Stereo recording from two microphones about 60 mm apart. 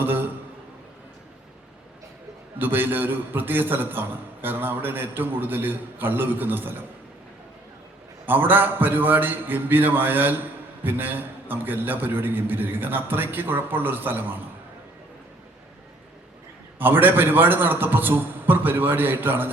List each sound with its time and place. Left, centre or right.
0.0 s a sound: right
2.6 s a man's voice: right
8.3 s a man's voice: right
16.7 s a man's voice: right